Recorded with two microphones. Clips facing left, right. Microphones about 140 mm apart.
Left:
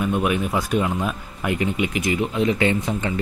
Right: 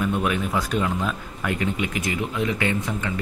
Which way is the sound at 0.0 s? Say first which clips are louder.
Left 2 dB; 15° left (ahead or behind).